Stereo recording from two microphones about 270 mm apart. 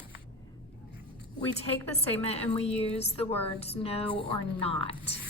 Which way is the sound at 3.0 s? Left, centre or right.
Left.